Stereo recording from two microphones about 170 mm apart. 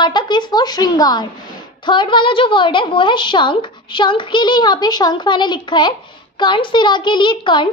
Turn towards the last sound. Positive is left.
turn(degrees=25)  # may be behind; listen again after turning